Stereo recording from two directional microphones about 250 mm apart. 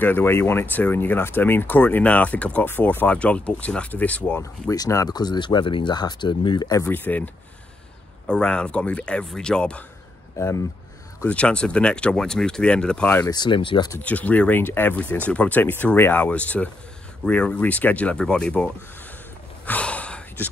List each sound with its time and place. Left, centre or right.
0.0 s speech: centre
8.3 s speech: centre
13.2 s speech: centre
13.9 s speech: centre
19.6 s a sound: centre